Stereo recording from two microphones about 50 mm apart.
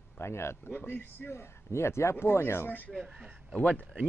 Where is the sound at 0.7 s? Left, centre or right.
Left.